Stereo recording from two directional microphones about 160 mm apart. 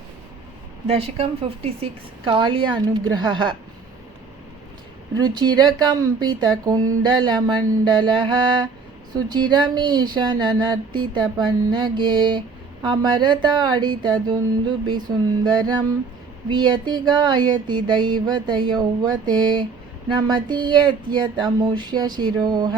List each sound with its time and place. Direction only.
0.9 s a woman's voice: 35° right (ahead or behind)
5.1 s speech: 25° right (ahead or behind)